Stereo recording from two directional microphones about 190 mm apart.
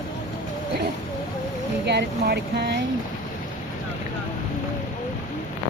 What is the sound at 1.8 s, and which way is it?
Speech, 60° right (ahead or behind).